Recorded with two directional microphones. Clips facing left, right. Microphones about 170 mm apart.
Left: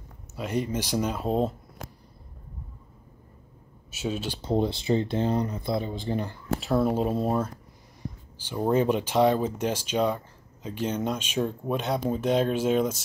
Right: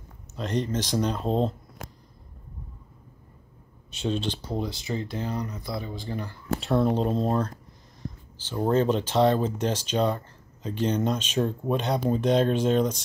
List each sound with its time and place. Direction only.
0.4 s speech: 10° left (ahead or behind)
3.9 s speech: 5° left (ahead or behind)
4.4 s speech: 25° left (ahead or behind)
6.6 s speech: centre (ahead or behind)